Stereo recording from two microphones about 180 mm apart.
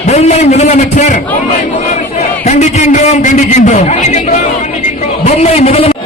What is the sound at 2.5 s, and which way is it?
A man's voice, 40° left (ahead or behind).